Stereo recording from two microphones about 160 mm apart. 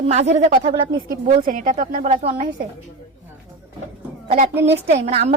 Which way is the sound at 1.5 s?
60° right (ahead or behind).